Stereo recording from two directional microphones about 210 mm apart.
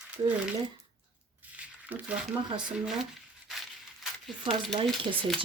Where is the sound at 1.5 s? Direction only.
5° right (ahead or behind).